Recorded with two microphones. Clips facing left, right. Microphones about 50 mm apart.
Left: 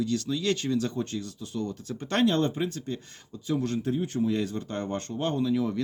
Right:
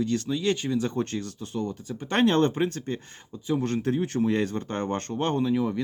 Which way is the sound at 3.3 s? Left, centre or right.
Right.